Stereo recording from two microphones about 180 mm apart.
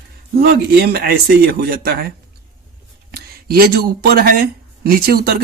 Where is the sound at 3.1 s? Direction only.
60° right (ahead or behind).